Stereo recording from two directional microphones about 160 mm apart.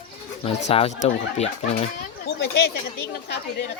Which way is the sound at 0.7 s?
40° left (ahead or behind).